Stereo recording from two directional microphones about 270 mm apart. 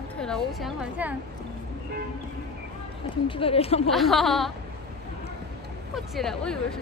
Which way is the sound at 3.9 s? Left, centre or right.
Centre.